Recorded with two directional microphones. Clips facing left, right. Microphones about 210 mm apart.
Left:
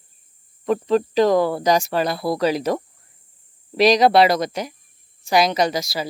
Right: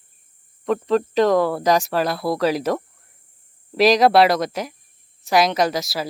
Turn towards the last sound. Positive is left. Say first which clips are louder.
# even
turn(degrees=0)  # may be behind; listen again after turning